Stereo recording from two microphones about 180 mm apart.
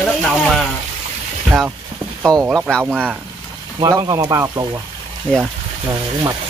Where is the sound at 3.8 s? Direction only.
20° right (ahead or behind).